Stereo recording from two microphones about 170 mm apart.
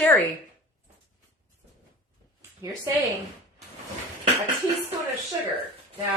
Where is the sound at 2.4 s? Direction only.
20° right (ahead or behind).